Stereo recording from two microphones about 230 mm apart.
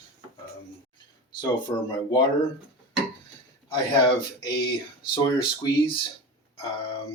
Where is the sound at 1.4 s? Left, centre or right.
Centre.